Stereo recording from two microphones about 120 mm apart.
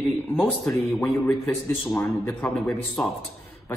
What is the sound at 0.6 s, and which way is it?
Speech, centre (ahead or behind).